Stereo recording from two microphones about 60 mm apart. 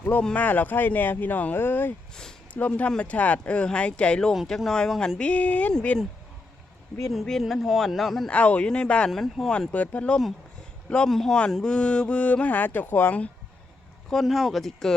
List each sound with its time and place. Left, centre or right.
0.2 s speech: left
2.5 s speech: left
7.1 s speech: centre
8.3 s speech: left
9.0 s speech: centre
9.5 s speech: left
11.1 s speech: centre; by 13.3 s left
14.1 s speech: centre